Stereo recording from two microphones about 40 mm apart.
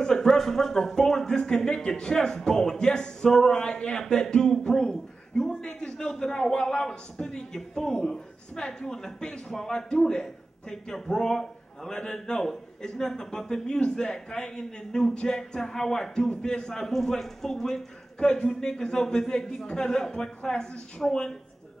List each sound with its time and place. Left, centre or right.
0.0 s a man's voice: centre